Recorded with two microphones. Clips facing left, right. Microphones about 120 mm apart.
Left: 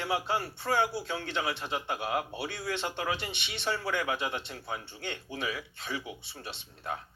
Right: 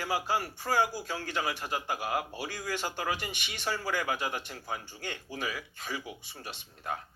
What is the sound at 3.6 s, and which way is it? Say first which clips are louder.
A man's voice: left 1 dB; 25° left (ahead or behind).